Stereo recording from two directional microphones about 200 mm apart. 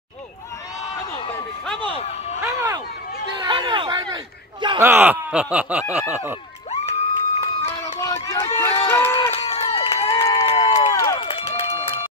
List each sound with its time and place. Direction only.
2.4 s a sound: 15° right (ahead or behind)
4.8 s speech: 10° right (ahead or behind)
6.7 s crowd: 35° left (ahead or behind)
8.0 s run: 15° left (ahead or behind)
9.3 s run: 30° left (ahead or behind)
11.1 s run: 30° left (ahead or behind)